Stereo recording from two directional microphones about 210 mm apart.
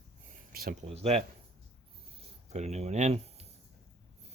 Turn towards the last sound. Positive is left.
turn(degrees=-30)  # may be behind; listen again after turning